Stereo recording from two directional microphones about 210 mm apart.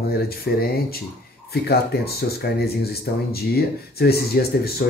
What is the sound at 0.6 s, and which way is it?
Speech, 45° left (ahead or behind).